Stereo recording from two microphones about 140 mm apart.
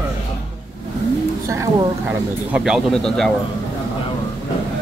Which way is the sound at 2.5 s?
5° right (ahead or behind).